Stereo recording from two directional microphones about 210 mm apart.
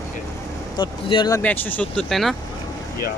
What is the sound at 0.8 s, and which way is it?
Speech, 25° left (ahead or behind).